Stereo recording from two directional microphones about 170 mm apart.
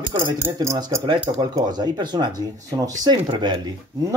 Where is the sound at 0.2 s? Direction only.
20° right (ahead or behind).